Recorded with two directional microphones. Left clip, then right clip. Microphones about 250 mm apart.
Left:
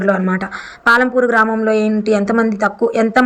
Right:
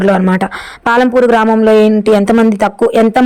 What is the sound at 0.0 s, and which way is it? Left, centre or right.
A woman's voice, right.